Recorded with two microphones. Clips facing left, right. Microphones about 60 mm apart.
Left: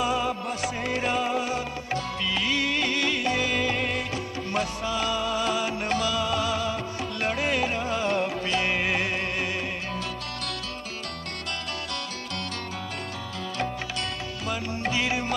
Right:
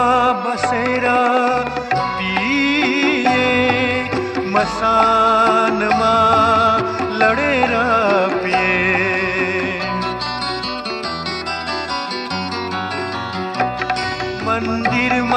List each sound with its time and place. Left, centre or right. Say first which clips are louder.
0.0 s music: right 12 dB; right
14.5 s music: right 11 dB; right